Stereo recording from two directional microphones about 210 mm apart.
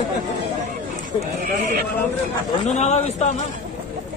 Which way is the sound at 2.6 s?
35° left (ahead or behind).